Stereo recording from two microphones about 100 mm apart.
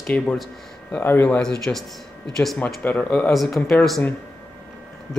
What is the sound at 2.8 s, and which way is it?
Speech, 15° left (ahead or behind).